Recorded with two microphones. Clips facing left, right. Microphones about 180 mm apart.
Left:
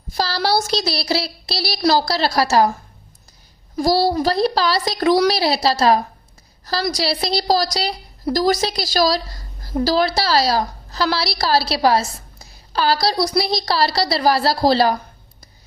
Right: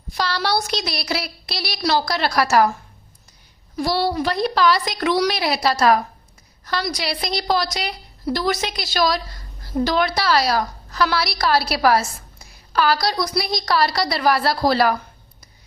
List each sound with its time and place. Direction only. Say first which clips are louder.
0.1 s a woman's voice: left 2 dB; 35° left (ahead or behind)
3.8 s a woman's voice: left 4 dB; 35° left (ahead or behind)